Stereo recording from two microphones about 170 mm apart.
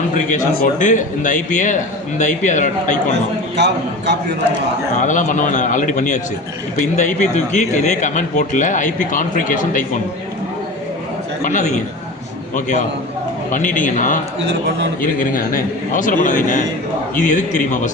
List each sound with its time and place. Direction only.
0.1 s speech: 50° left (ahead or behind)
3.5 s a man's voice: 90° right
5.0 s speech: 50° left (ahead or behind)
11.4 s speech: 45° left (ahead or behind)